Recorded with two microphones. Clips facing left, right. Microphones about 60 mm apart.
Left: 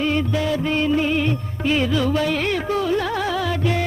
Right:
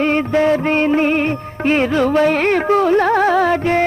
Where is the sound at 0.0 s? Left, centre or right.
Right.